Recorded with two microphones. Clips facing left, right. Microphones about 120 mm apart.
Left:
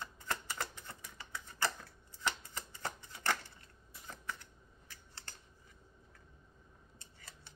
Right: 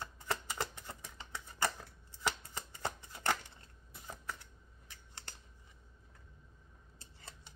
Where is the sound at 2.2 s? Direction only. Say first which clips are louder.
Right 1 dB; 10° right (ahead or behind).